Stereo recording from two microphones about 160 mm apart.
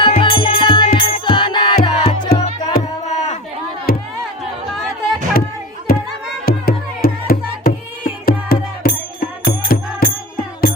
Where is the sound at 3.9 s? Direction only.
70° left (ahead or behind).